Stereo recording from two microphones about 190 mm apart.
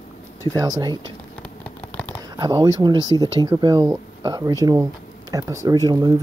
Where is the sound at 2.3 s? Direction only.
20° right (ahead or behind).